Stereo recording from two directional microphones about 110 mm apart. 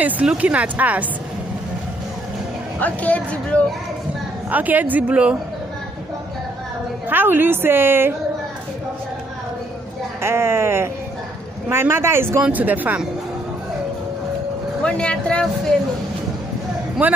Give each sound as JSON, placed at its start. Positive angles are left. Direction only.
{"t": 0.0, "sound": "speech", "side_deg": -10}
{"t": 2.8, "sound": "speech", "side_deg": 15}
{"t": 4.5, "sound": "speech", "side_deg": -15}
{"t": 7.1, "sound": "a woman's voice", "side_deg": -20}
{"t": 10.2, "sound": "a woman's voice", "side_deg": -25}
{"t": 14.8, "sound": "speech", "side_deg": 10}
{"t": 17.0, "sound": "speech", "side_deg": -15}